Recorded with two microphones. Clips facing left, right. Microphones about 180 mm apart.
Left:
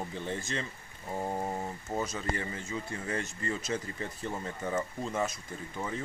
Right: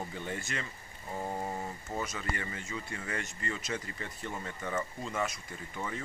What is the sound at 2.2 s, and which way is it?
Speech, 35° left (ahead or behind).